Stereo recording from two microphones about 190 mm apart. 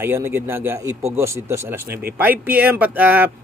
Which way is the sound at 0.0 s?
10° right (ahead or behind).